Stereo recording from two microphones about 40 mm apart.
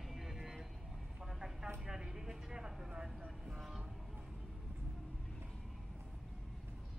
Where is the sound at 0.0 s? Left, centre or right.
Centre.